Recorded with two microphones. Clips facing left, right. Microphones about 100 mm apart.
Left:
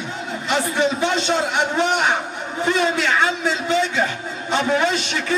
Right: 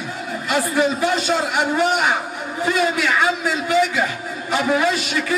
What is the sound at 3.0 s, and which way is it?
A man's voice, 25° left (ahead or behind).